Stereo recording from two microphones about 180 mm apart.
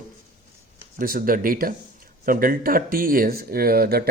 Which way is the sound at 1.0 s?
50° right (ahead or behind).